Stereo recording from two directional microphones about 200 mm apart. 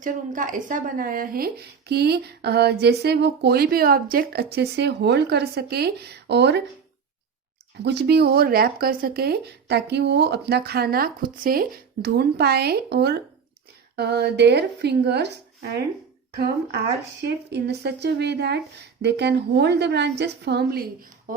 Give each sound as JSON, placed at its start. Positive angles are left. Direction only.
{"t": 0.0, "sound": "speech", "side_deg": -40}
{"t": 7.9, "sound": "a woman's voice", "side_deg": -55}
{"t": 17.2, "sound": "a woman's voice", "side_deg": -55}